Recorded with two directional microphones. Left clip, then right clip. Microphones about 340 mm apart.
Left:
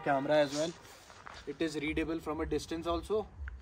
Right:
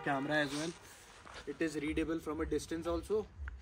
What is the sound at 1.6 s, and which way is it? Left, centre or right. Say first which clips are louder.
Speech: left 2 dB; centre.